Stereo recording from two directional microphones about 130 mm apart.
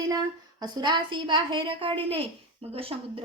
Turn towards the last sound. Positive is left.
turn(degrees=-45)  # may be behind; listen again after turning